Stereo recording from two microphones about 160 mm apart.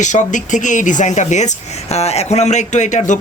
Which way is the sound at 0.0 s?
50° left (ahead or behind).